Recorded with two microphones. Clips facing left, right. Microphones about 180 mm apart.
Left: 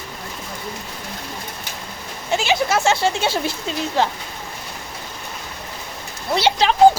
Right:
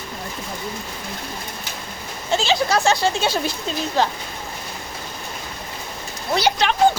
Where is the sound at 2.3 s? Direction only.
15° left (ahead or behind).